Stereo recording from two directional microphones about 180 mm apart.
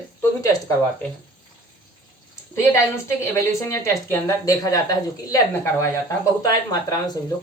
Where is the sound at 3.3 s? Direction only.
15° left (ahead or behind).